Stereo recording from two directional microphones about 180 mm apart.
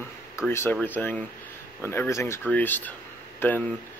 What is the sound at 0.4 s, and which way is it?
Speech, 15° left (ahead or behind).